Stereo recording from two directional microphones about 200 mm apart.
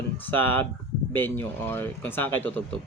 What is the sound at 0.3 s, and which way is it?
Speech, 10° left (ahead or behind).